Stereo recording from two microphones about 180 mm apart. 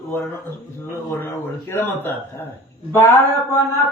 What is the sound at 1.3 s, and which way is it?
A man's voice, 10° left (ahead or behind).